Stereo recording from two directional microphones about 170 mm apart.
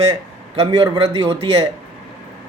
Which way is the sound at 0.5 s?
35° right (ahead or behind).